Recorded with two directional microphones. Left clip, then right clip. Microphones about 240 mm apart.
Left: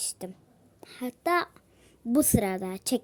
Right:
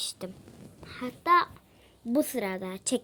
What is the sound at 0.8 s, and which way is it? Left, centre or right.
A child's voice, left.